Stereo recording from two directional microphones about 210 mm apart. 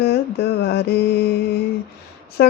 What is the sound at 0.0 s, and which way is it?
Mantra, 50° left (ahead or behind).